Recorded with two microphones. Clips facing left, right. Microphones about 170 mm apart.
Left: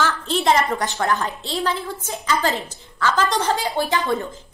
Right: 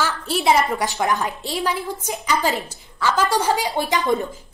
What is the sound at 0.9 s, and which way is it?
A woman's voice, 15° right (ahead or behind).